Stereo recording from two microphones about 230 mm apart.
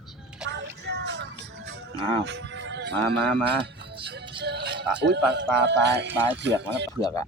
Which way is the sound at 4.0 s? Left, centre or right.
Right.